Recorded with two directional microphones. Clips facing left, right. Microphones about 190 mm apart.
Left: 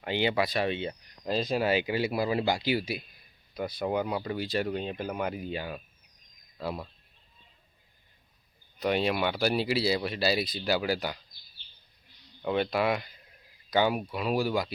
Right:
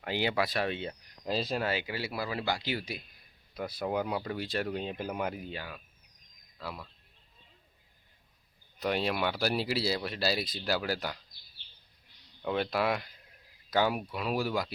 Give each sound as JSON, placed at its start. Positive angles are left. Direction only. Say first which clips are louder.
{"t": 0.0, "sound": "speech", "louder": "left 3 dB", "side_deg": 0}
{"t": 1.5, "sound": "speech", "louder": "left 6 dB", "side_deg": 15}
{"t": 3.5, "sound": "speech", "louder": "left 3 dB", "side_deg": -5}
{"t": 6.6, "sound": "speech", "louder": "left 7 dB", "side_deg": 25}
{"t": 8.8, "sound": "speech", "louder": "left 3 dB", "side_deg": 0}
{"t": 12.4, "sound": "speech", "louder": "left 3 dB", "side_deg": 0}